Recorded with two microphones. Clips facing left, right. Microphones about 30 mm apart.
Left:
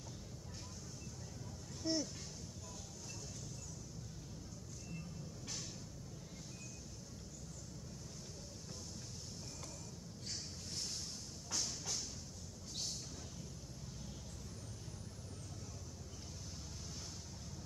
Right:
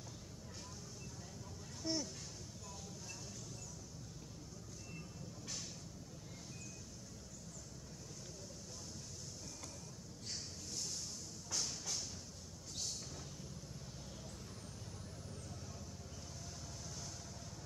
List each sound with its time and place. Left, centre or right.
1.8 s speech: centre
10.7 s vehicle: left
11.5 s music: centre